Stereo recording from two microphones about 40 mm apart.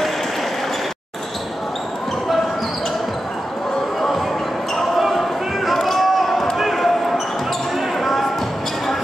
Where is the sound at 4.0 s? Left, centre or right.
Centre.